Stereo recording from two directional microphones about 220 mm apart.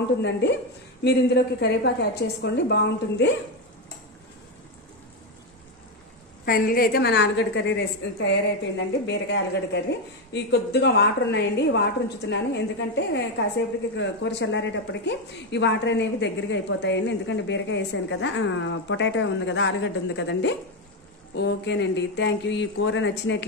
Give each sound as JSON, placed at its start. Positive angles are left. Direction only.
{"t": 1.0, "sound": "speech", "side_deg": 50}
{"t": 6.4, "sound": "speech", "side_deg": 40}